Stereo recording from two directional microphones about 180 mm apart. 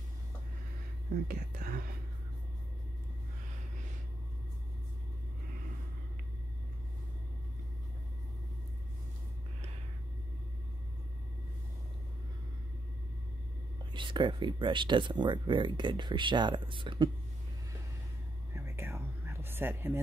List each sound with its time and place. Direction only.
1.2 s speech: 55° right (ahead or behind)
13.9 s speech: 25° right (ahead or behind)
18.5 s whispering: 15° right (ahead or behind)